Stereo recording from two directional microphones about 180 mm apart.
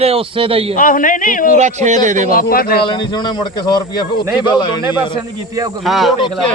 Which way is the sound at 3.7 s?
25° left (ahead or behind).